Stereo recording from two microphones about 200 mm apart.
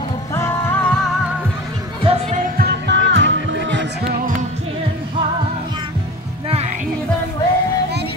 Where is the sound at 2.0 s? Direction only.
30° right (ahead or behind).